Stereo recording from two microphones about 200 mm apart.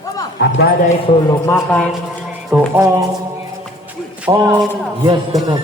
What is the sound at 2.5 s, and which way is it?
Speech, 10° right (ahead or behind).